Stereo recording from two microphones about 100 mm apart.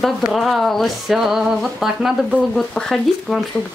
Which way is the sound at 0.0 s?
Centre (ahead or behind).